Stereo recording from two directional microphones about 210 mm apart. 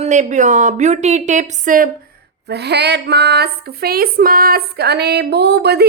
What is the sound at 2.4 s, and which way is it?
A woman's voice, 50° right (ahead or behind).